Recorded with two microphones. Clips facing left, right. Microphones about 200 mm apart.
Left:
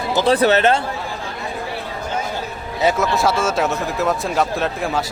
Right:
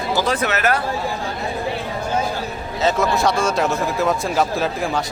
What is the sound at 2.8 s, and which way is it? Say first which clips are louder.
Speech: left 1 dB; 5° left (ahead or behind).